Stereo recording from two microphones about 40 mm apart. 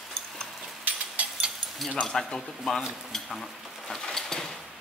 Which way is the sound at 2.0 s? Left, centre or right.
Centre.